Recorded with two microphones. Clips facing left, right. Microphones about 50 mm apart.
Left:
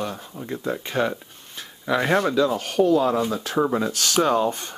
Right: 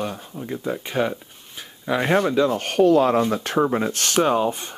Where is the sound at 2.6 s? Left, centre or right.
Right.